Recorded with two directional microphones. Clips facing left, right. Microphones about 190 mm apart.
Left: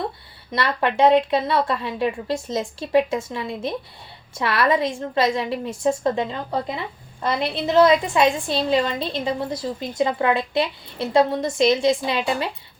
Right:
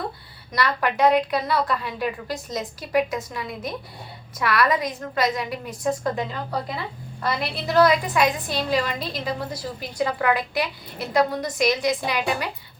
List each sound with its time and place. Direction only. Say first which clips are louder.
0.5 s a woman's voice: left 2 dB; 25° left (ahead or behind)